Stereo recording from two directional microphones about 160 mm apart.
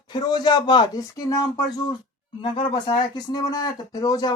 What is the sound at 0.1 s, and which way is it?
Speech, 25° left (ahead or behind).